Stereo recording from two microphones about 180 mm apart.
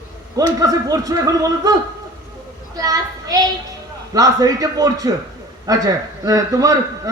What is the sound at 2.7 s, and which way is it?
Children playing, 20° right (ahead or behind).